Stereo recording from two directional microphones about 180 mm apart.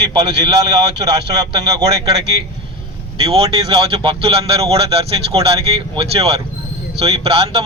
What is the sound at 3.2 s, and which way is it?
Speech, 30° right (ahead or behind).